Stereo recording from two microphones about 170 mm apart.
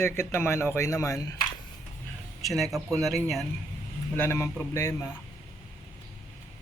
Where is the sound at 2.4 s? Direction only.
Centre (ahead or behind).